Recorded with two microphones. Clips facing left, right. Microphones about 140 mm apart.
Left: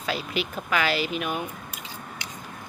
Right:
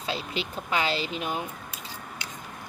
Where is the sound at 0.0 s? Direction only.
25° right (ahead or behind).